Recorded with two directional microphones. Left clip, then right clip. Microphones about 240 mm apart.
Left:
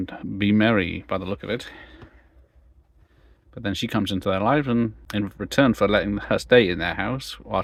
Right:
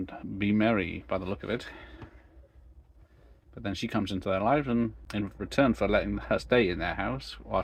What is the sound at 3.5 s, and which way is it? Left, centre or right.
Speech, left.